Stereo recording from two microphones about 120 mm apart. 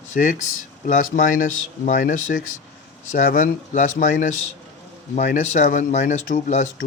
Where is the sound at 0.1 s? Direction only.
90° left.